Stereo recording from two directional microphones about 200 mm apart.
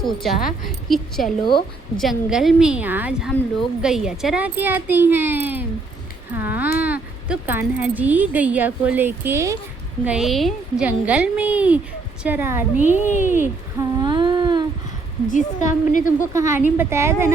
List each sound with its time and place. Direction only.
0.0 s a woman's voice: centre (ahead or behind)
6.3 s a sound: 10° right (ahead or behind)
6.7 s speech: 10° right (ahead or behind)
10.1 s a child's voice: centre (ahead or behind)
12.8 s a woman's voice: 40° left (ahead or behind)
13.4 s humming: 20° right (ahead or behind)
15.3 s a woman's voice: 40° left (ahead or behind)
16.3 s a child's voice: 15° right (ahead or behind)